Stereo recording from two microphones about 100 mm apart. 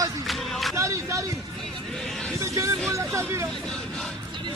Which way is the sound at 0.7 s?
30° right (ahead or behind).